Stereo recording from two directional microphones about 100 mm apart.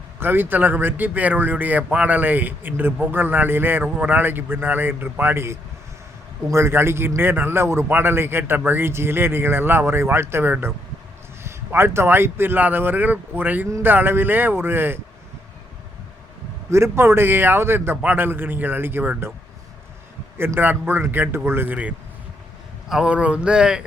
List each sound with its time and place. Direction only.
0.2 s speech: 20° right (ahead or behind)
16.6 s speech: 25° right (ahead or behind)
20.4 s speech: 20° right (ahead or behind)